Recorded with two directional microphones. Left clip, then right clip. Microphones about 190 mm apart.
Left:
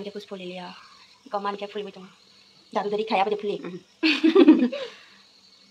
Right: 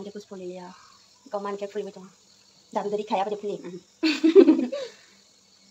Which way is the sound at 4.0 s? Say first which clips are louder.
Right 1 dB; 10° right (ahead or behind).